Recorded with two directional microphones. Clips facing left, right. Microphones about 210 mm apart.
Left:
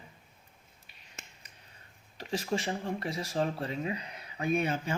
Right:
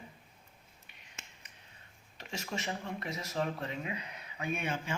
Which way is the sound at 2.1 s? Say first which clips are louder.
Left 8 dB; 35° left (ahead or behind).